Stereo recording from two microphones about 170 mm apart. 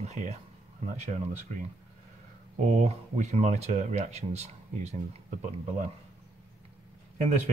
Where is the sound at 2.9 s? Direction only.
40° right (ahead or behind).